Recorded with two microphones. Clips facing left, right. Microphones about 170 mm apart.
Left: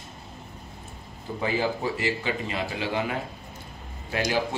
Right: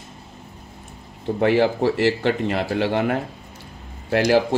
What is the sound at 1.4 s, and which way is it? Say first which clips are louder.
Speech: right 9 dB; 75° right (ahead or behind).